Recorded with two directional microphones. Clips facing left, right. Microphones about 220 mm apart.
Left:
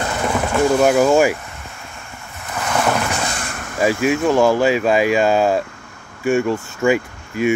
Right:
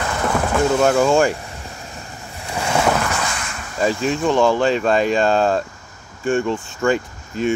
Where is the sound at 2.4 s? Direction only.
30° right (ahead or behind).